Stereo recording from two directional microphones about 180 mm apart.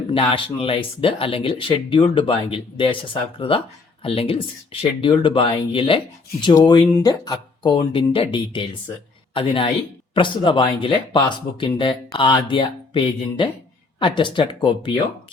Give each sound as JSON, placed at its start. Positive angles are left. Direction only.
{"t": 0.1, "sound": "a woman's voice", "side_deg": 30}